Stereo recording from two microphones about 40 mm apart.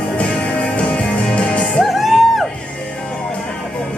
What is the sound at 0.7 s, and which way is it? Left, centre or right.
Music, left.